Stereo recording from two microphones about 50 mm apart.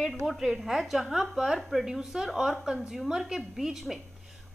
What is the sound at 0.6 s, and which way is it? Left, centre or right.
A woman's voice, centre.